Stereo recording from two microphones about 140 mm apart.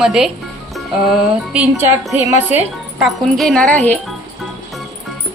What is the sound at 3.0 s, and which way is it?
Speech, centre (ahead or behind).